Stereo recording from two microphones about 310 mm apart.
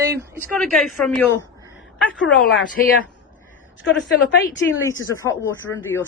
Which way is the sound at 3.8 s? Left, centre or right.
Left.